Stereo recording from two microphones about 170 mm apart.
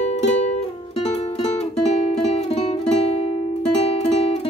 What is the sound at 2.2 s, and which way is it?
Music, 35° left (ahead or behind).